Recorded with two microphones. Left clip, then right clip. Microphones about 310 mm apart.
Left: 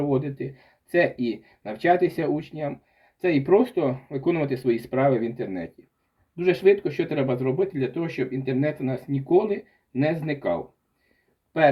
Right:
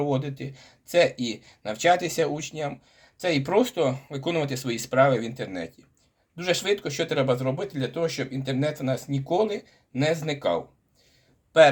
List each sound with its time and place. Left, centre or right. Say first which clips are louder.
0.0 s speech: left 2 dB; right